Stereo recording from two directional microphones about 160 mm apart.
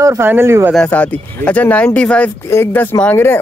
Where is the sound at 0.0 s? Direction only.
15° right (ahead or behind).